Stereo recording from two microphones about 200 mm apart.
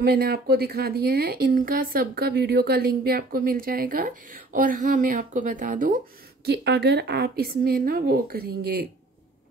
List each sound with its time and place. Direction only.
0.0 s speech: 50° right (ahead or behind)
6.4 s speech: 55° right (ahead or behind)